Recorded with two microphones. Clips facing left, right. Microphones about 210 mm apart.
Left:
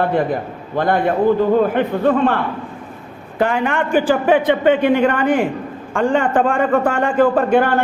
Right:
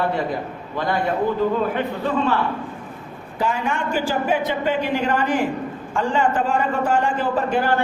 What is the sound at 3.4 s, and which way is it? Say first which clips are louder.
A man's voice: left 6 dB; 60° left (ahead or behind).